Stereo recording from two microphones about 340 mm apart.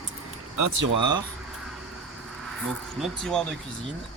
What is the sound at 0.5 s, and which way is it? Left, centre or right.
Speech, right.